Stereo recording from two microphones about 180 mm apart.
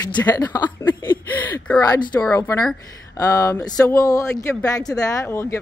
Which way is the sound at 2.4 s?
10° left (ahead or behind).